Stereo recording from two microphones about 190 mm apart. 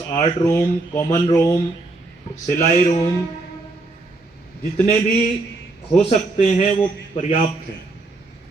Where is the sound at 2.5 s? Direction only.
35° left (ahead or behind).